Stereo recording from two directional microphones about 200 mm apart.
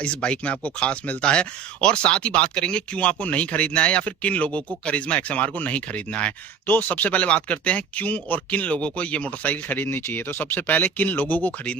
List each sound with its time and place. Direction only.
0.0 s speech: 5° left (ahead or behind)